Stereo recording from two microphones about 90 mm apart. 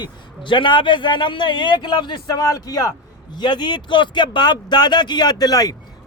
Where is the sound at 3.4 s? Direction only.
55° left (ahead or behind).